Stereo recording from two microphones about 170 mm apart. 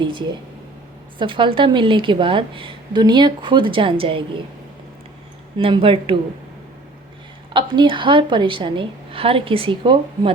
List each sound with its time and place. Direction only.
0.0 s a woman's voice: 30° right (ahead or behind)
5.5 s a woman's voice: 30° right (ahead or behind)
7.5 s a woman's voice: 25° right (ahead or behind)